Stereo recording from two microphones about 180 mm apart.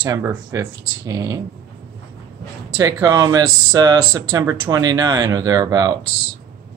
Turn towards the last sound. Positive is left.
turn(degrees=-25)  # may be behind; listen again after turning